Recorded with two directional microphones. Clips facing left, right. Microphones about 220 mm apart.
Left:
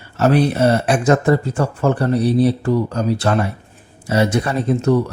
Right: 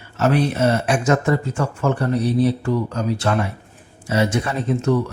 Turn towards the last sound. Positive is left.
turn(degrees=40)  # may be behind; listen again after turning